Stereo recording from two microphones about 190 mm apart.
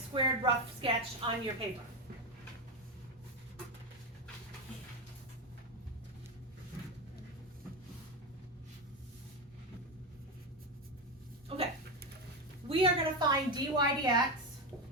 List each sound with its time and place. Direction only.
0.1 s a woman's voice: 25° right (ahead or behind)
12.6 s a woman's voice: 25° right (ahead or behind)